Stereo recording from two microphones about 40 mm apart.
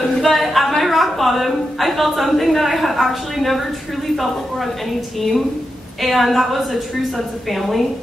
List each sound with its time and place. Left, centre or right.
0.2 s a woman's voice: centre
6.0 s a woman's voice: centre